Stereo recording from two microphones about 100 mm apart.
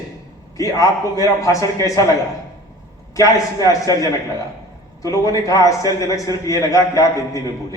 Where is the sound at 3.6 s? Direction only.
35° left (ahead or behind).